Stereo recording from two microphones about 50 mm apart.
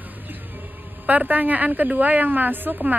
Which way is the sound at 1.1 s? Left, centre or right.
Right.